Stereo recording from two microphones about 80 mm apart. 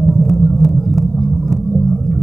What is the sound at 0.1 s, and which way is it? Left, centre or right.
Vehicle, centre.